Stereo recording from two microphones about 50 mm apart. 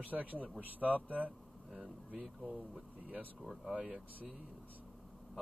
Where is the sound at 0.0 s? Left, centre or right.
Right.